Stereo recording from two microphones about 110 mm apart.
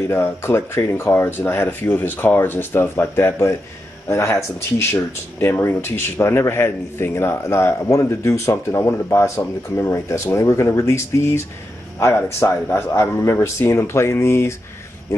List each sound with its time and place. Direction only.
0.1 s speech: 20° left (ahead or behind)